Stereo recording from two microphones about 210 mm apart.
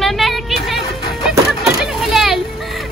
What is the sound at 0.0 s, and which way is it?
Music, centre (ahead or behind).